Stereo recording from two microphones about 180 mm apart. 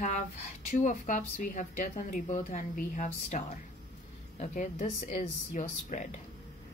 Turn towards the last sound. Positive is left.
turn(degrees=40)  # may be behind; listen again after turning